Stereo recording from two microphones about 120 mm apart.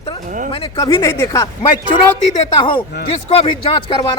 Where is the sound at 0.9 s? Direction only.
25° left (ahead or behind).